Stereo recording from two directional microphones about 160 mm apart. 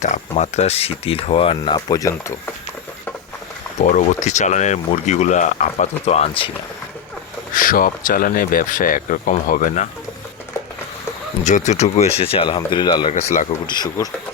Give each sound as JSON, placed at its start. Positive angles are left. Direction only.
{"t": 0.0, "sound": "speech", "side_deg": 45}
{"t": 1.9, "sound": "speech", "side_deg": 20}
{"t": 3.8, "sound": "speech", "side_deg": 50}
{"t": 7.5, "sound": "speech", "side_deg": 60}
{"t": 11.4, "sound": "speech", "side_deg": 50}